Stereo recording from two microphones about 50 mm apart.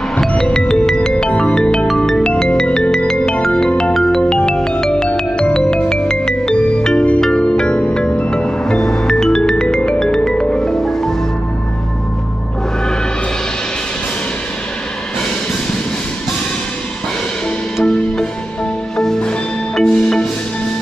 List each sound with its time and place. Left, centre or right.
0.3 s music: centre
17.8 s music: centre